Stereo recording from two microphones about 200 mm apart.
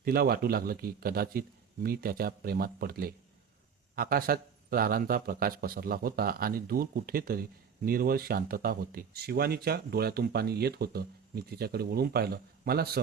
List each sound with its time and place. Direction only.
0.0 s speech: 50° right (ahead or behind)